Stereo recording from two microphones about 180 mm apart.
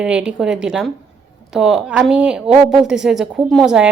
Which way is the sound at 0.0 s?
5° right (ahead or behind).